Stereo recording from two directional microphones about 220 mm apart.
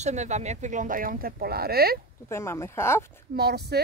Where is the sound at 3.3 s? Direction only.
45° right (ahead or behind).